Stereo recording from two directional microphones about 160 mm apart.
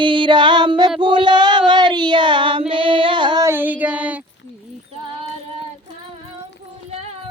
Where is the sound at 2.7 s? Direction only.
30° right (ahead or behind).